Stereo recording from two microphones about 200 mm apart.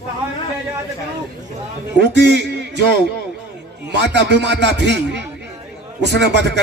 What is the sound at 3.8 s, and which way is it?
A man's voice, 60° right (ahead or behind).